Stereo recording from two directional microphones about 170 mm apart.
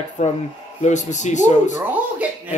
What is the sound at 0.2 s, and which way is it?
Speech, 45° left (ahead or behind).